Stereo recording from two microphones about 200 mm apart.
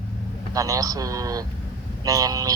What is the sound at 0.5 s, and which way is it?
A man's voice, 15° right (ahead or behind).